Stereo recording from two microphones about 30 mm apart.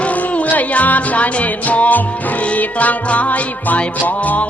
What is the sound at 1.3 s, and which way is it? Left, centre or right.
Music, left.